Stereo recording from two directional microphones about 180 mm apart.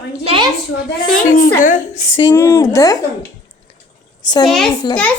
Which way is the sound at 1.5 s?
45° left (ahead or behind).